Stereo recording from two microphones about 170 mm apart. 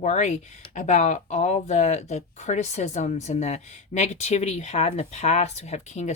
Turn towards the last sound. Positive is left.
turn(degrees=40)  # may be behind; listen again after turning